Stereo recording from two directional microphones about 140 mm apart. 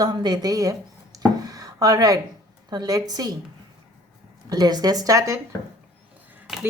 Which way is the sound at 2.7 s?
25° right (ahead or behind).